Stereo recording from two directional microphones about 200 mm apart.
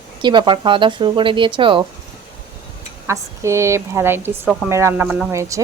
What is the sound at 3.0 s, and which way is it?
A woman's voice, 15° right (ahead or behind).